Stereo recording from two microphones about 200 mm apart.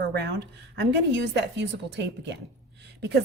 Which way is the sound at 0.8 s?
60° right (ahead or behind).